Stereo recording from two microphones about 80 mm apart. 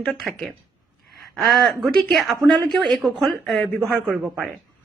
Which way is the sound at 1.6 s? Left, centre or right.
Centre.